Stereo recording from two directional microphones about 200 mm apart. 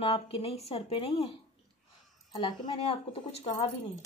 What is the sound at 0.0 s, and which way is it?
A woman's voice, 30° left (ahead or behind).